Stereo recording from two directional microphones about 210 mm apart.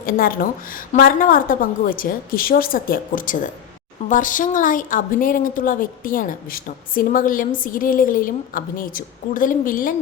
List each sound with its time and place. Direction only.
0.0 s a woman's voice: 45° left (ahead or behind)